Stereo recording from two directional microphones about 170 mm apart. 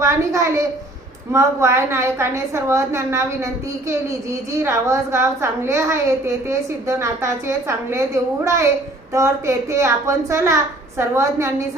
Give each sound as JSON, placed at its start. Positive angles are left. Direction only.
{"t": 0.0, "sound": "a woman's voice", "side_deg": -15}